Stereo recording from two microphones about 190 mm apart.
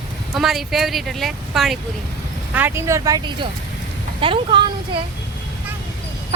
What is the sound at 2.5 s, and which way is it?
A woman's voice, 10° right (ahead or behind).